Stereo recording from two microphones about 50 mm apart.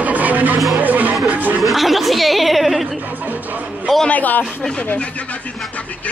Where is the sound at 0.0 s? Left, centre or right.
Right.